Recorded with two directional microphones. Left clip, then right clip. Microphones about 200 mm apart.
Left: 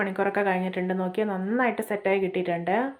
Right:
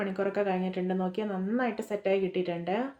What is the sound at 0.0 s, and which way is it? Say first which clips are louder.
A woman's voice: left 5 dB; 15° left (ahead or behind).